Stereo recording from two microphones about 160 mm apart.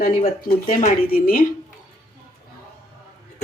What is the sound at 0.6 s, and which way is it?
Speech, 60° left (ahead or behind).